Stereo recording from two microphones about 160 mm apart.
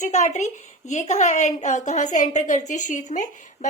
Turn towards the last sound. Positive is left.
turn(degrees=50)  # may be behind; listen again after turning